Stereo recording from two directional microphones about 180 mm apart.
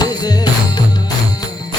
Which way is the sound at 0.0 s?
20° left (ahead or behind).